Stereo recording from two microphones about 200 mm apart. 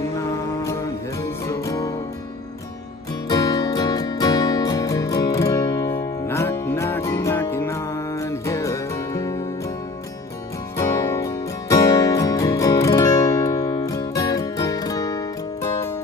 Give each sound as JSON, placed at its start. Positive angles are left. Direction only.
{"t": 1.6, "sound": "music", "side_deg": 15}
{"t": 3.3, "sound": "music", "side_deg": 20}
{"t": 10.8, "sound": "music", "side_deg": 15}